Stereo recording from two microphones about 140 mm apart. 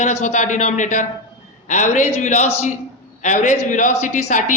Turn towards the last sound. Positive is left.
turn(degrees=60)  # may be behind; listen again after turning